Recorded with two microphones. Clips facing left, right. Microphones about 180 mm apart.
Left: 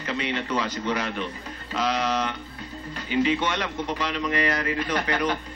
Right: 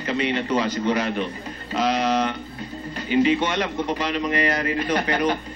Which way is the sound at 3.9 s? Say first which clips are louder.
Right 2 dB; 50° right (ahead or behind).